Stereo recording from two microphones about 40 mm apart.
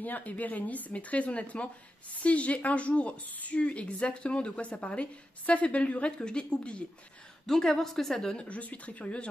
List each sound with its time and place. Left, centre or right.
0.0 s speech: left
3.3 s a woman's voice: left
3.5 s a woman's voice: left
7.4 s a woman's voice: centre
8.5 s speech: left